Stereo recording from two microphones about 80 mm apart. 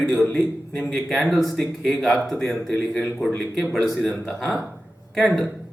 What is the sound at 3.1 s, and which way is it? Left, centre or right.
A man's voice, centre.